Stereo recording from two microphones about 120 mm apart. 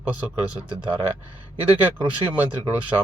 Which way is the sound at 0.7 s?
45° right (ahead or behind).